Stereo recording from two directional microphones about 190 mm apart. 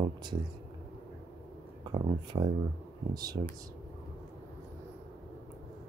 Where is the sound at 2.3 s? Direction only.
25° right (ahead or behind).